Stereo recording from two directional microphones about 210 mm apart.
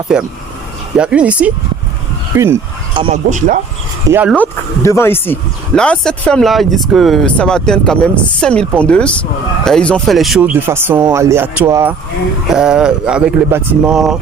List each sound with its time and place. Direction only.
0.1 s speech: 5° right (ahead or behind)
2.3 s a sound: 15° right (ahead or behind)
3.0 s speech: 35° right (ahead or behind)
4.1 s speech: 5° right (ahead or behind)
4.4 s speech: 10° left (ahead or behind)